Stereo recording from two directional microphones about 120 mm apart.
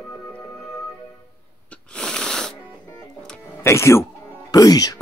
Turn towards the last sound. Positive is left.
turn(degrees=30)  # may be behind; listen again after turning